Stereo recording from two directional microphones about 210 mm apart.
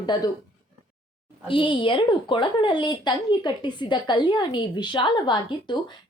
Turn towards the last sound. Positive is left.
turn(degrees=20)  # may be behind; listen again after turning